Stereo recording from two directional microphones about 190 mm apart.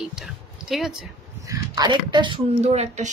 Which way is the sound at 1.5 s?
20° right (ahead or behind).